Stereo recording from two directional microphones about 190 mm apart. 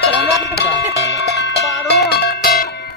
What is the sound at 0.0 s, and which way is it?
Music, 65° left (ahead or behind).